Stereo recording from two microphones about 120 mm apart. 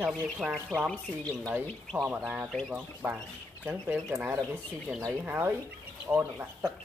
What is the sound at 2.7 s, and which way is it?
Speech, 10° right (ahead or behind).